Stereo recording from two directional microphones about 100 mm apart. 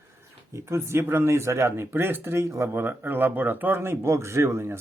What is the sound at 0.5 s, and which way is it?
Speech, 25° right (ahead or behind).